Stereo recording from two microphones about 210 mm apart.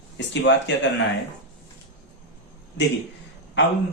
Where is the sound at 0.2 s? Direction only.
55° left (ahead or behind).